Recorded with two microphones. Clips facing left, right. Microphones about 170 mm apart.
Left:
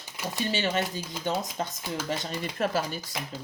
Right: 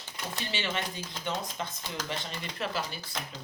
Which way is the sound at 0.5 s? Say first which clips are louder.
Left 5 dB; 40° left (ahead or behind).